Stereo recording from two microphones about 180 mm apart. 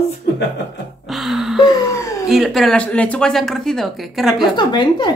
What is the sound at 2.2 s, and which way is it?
Speech, centre (ahead or behind).